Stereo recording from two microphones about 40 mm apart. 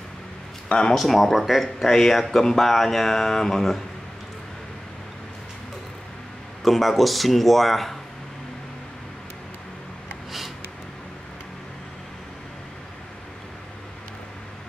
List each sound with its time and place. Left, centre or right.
0.7 s speech: left
0.9 s speech: centre
6.6 s speech: centre